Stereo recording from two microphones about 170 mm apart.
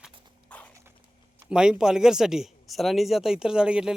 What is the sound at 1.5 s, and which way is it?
Speech, 5° right (ahead or behind).